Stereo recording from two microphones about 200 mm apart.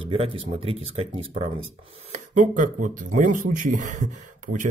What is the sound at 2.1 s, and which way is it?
Speech, 40° right (ahead or behind).